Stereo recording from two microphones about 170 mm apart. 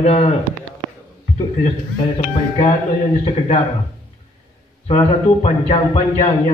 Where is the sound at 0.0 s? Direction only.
35° left (ahead or behind).